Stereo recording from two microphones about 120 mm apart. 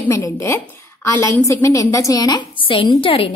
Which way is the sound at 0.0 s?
25° left (ahead or behind).